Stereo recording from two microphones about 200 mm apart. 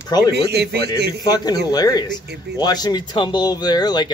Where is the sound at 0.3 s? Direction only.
55° right (ahead or behind).